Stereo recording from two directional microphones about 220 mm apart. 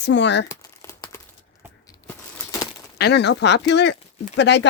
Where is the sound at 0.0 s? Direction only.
55° left (ahead or behind).